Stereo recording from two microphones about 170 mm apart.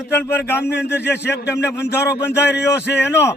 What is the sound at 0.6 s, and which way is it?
Speech, 80° left.